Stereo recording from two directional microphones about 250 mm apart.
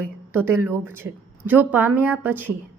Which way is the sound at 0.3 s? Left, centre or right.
Centre.